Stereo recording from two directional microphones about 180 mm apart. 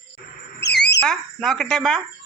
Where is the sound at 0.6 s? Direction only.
70° left (ahead or behind).